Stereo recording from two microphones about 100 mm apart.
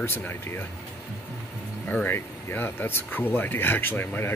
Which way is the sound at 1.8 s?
20° left (ahead or behind).